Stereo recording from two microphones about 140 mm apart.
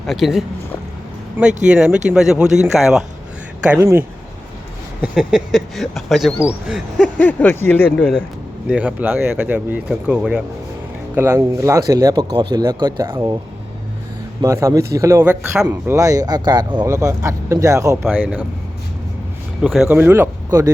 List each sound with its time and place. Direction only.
0.1 s speech: centre (ahead or behind)
1.6 s speech: 5° right (ahead or behind)
3.7 s speech: 15° right (ahead or behind)
5.0 s speech: 5° right (ahead or behind)
7.2 s speech: 10° left (ahead or behind)
8.7 s speech: 10° right (ahead or behind)
11.1 s speech: 20° right (ahead or behind)
14.4 s speech: 25° right (ahead or behind)
19.6 s speech: 5° right (ahead or behind)
20.0 s speech: 15° right (ahead or behind)